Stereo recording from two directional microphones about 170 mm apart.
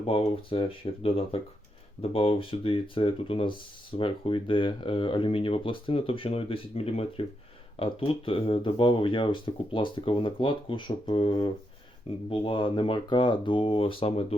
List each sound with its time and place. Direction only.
0.0 s speech: 35° left (ahead or behind)